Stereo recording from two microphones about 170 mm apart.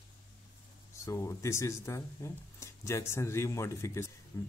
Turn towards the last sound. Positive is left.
turn(degrees=20)  # may be behind; listen again after turning